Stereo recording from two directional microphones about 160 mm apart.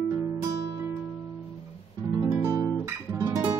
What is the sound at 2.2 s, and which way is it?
Guitar, 15° right (ahead or behind).